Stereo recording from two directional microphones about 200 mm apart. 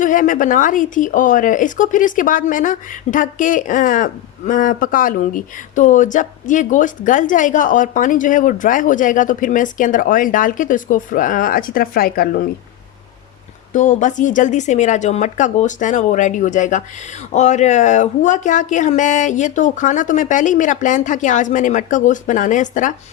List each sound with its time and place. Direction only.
0.0 s speech: 40° left (ahead or behind)
13.7 s speech: 40° left (ahead or behind)